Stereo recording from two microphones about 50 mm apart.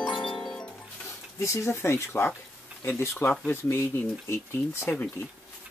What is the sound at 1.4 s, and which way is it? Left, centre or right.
Speech, left.